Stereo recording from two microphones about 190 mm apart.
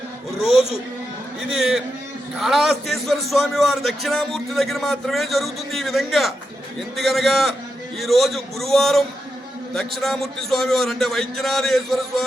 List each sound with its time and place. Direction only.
1.4 s a man's voice: centre (ahead or behind)